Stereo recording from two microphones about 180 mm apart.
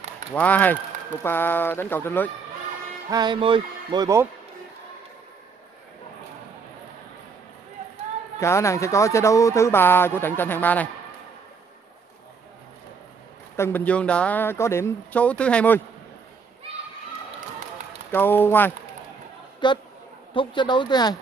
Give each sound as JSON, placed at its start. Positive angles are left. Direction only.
{"t": 0.3, "sound": "speech", "side_deg": 10}
{"t": 3.1, "sound": "speech", "side_deg": -25}
{"t": 8.4, "sound": "speech", "side_deg": 15}
{"t": 13.6, "sound": "speech", "side_deg": 10}
{"t": 18.1, "sound": "speech", "side_deg": 10}
{"t": 19.6, "sound": "speech", "side_deg": 25}